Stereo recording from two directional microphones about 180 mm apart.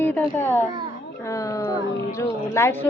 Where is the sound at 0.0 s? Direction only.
10° left (ahead or behind).